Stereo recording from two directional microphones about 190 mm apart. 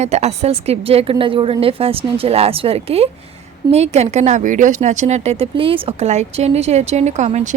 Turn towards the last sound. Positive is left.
turn(degrees=-35)  # may be behind; listen again after turning